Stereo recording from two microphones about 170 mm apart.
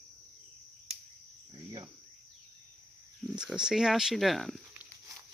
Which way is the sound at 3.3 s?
5° right (ahead or behind).